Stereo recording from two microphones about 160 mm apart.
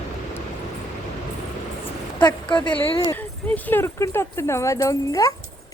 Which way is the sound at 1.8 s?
30° left (ahead or behind).